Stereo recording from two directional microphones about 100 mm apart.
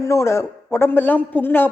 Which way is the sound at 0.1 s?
25° left (ahead or behind).